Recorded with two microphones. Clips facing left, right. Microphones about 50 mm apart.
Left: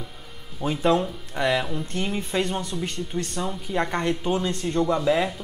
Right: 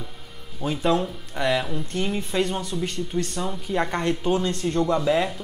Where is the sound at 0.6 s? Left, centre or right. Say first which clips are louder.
Left 1 dB; centre.